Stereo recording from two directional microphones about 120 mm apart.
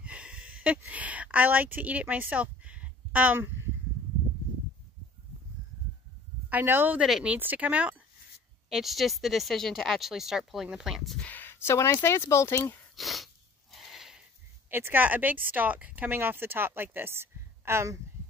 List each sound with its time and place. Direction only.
0.0 s a sound: 10° right (ahead or behind)
6.5 s speech: 20° right (ahead or behind)
7.1 s speech: 5° right (ahead or behind)
7.3 s speech: 15° right (ahead or behind)
11.2 s speech: 15° left (ahead or behind)
12.9 s a sound: centre (ahead or behind)
14.7 s speech: 20° right (ahead or behind)